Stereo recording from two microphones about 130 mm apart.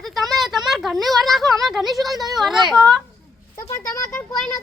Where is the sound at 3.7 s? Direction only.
20° left (ahead or behind).